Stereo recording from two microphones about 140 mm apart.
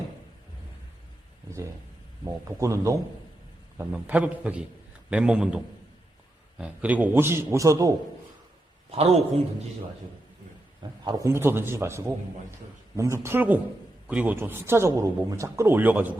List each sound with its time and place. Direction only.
2.2 s a man's voice: 20° right (ahead or behind)
3.9 s a man's voice: 10° right (ahead or behind)
6.6 s speech: 10° right (ahead or behind)
8.9 s a man's voice: 45° right (ahead or behind)
11.0 s a man's voice: 25° right (ahead or behind)